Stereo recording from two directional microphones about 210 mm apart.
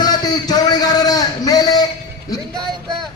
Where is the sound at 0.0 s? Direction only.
20° left (ahead or behind).